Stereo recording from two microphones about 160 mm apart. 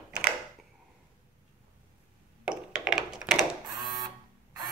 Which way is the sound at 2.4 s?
5° right (ahead or behind).